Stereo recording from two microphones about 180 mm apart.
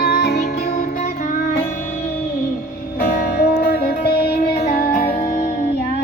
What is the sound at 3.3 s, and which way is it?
Music, 55° left (ahead or behind).